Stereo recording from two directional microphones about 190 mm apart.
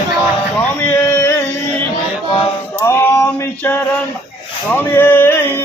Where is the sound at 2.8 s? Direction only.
15° left (ahead or behind).